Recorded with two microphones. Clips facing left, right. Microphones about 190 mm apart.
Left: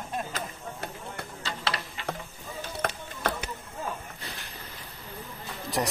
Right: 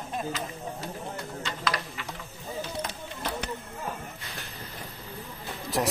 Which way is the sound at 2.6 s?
60° left (ahead or behind).